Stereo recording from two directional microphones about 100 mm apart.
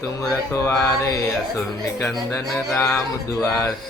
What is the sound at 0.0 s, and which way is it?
Music, 35° left (ahead or behind).